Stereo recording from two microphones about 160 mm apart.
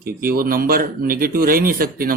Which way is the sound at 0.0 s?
65° right (ahead or behind).